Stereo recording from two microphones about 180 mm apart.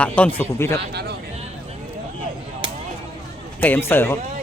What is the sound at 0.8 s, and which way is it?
Speech, 65° right (ahead or behind).